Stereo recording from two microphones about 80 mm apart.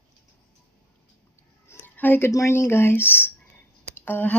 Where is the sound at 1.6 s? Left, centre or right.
Left.